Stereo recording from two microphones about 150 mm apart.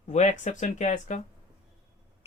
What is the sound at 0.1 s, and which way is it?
Speech, 50° left (ahead or behind).